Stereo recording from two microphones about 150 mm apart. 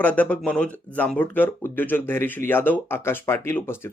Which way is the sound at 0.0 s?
10° left (ahead or behind).